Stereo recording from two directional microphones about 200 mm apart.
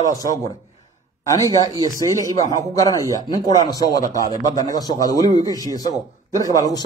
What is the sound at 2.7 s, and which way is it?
A man's voice, 15° left (ahead or behind).